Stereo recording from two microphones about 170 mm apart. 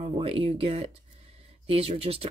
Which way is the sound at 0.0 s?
35° right (ahead or behind).